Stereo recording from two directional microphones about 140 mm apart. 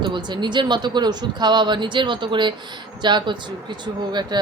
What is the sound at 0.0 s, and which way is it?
Speech, 35° right (ahead or behind).